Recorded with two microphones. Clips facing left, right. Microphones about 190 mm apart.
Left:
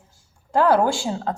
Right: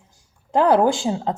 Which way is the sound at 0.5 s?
20° right (ahead or behind).